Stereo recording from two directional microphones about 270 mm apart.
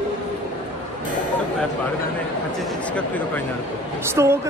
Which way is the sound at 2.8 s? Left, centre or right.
Centre.